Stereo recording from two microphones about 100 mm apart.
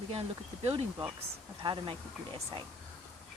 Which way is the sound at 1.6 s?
55° right (ahead or behind).